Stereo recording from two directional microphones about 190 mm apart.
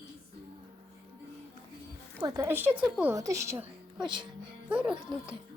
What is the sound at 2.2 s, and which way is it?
A woman's voice, 15° right (ahead or behind).